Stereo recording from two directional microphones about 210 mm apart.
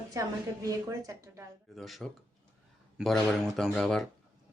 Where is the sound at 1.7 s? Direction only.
Centre (ahead or behind).